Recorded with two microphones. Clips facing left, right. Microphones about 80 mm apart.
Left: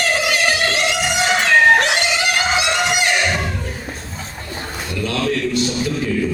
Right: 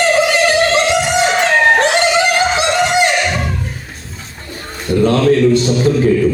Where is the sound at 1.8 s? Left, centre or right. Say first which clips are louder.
Right 6 dB; right.